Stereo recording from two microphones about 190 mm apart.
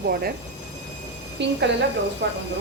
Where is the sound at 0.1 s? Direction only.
55° right (ahead or behind).